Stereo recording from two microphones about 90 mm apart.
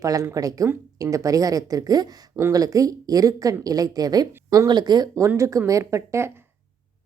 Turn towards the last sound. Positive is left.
turn(degrees=-30)  # may be behind; listen again after turning